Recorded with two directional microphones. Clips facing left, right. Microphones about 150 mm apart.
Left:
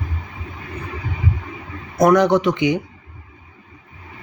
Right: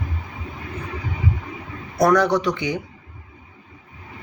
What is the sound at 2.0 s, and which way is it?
Speech, 20° left (ahead or behind).